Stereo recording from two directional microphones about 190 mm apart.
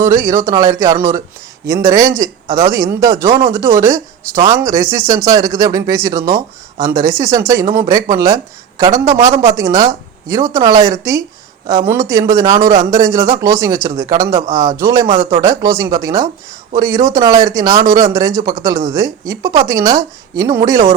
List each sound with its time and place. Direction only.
0.0 s speech: 15° right (ahead or behind)